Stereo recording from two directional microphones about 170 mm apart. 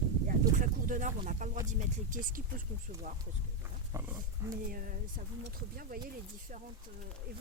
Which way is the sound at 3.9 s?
15° right (ahead or behind).